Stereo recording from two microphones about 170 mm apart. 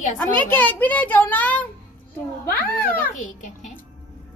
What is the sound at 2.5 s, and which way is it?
Speech, 65° left (ahead or behind).